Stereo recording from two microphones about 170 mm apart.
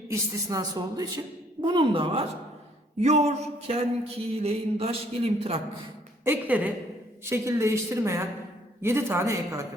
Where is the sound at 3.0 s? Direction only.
40° right (ahead or behind).